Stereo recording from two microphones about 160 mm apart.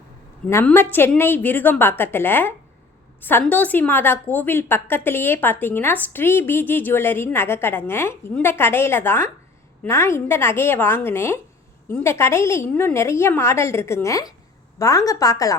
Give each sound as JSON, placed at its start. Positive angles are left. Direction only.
{"t": 0.4, "sound": "a woman's voice", "side_deg": 10}